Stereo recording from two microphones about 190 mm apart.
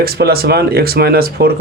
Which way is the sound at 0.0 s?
55° right (ahead or behind).